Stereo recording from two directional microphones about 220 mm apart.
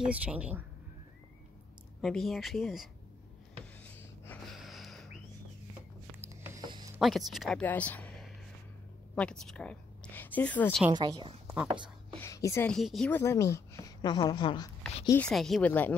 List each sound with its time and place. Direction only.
0.0 s speech: 5° right (ahead or behind)
2.0 s speech: centre (ahead or behind)
4.3 s snort: centre (ahead or behind)
6.2 s music: 10° right (ahead or behind)
7.0 s a woman's voice: centre (ahead or behind)
10.9 s a woman's voice: 20° right (ahead or behind)
12.2 s speech: 15° left (ahead or behind)
12.7 s a woman's voice: centre (ahead or behind); by 14.7 s 20° left (ahead or behind)
15.0 s a woman's voice: 5° left (ahead or behind)